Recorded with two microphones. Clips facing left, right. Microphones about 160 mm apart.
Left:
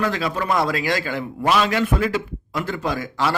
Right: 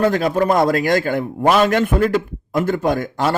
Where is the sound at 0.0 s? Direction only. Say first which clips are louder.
Right 7 dB; 45° right (ahead or behind).